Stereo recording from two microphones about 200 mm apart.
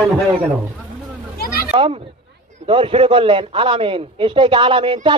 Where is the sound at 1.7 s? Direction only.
30° right (ahead or behind).